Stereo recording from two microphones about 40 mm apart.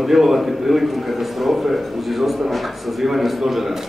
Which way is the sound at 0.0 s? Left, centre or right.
Centre.